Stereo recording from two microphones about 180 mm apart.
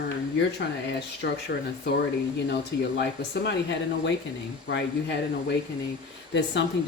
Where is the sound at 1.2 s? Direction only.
65° left (ahead or behind); by 5.5 s 80° left.